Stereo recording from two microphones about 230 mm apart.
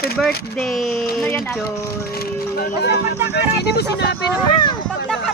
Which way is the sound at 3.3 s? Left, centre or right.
Left.